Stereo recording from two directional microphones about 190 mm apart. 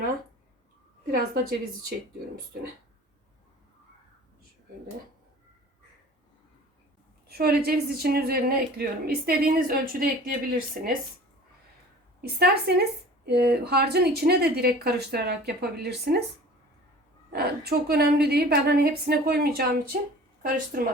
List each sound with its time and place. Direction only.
1.1 s speech: 50° right (ahead or behind)
7.3 s speech: 55° right (ahead or behind)
12.2 s a woman's voice: 55° right (ahead or behind)
17.3 s a woman's voice: 55° right (ahead or behind)